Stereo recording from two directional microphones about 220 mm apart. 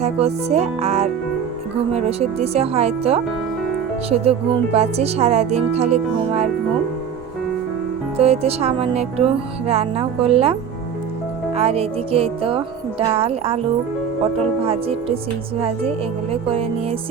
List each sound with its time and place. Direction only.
0.0 s speech: 30° right (ahead or behind)
8.1 s speech: 25° right (ahead or behind)
16.3 s speech: 25° right (ahead or behind)